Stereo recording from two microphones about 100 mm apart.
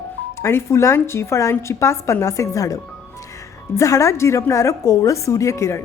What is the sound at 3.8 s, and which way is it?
A woman's voice, 30° left (ahead or behind).